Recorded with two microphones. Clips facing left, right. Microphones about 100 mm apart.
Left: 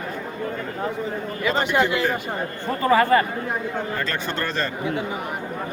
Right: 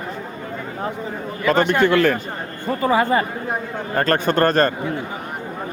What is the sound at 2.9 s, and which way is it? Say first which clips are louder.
Speech: left 1 dB; 15° right (ahead or behind).